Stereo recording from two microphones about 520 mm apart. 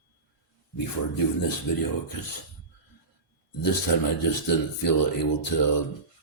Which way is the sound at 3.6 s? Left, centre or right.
Left.